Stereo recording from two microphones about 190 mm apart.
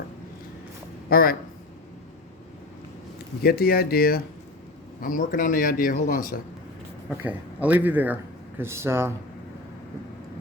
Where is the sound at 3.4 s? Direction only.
55° left (ahead or behind).